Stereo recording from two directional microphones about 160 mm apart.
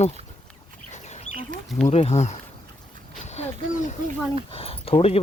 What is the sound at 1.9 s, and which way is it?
Speech, 40° left (ahead or behind).